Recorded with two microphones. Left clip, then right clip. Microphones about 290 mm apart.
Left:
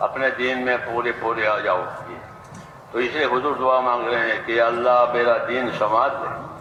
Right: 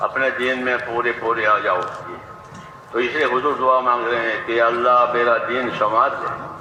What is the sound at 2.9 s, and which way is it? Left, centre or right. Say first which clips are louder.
A man's voice: right 2 dB; centre.